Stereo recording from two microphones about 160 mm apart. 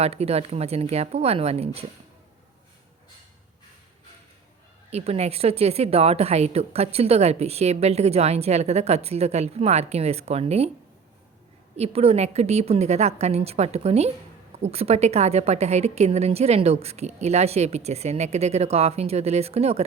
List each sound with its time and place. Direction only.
0.0 s a woman's voice: 40° right (ahead or behind)
4.9 s a woman's voice: 40° right (ahead or behind)
11.8 s a woman's voice: 40° right (ahead or behind)